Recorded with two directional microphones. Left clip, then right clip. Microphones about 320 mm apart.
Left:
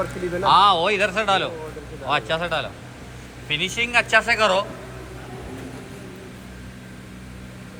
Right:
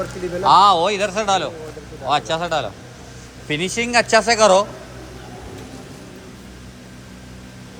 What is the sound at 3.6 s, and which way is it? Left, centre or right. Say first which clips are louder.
Speech: right 1 dB; right.